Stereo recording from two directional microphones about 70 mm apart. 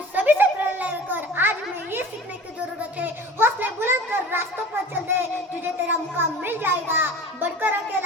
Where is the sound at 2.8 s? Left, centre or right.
Right.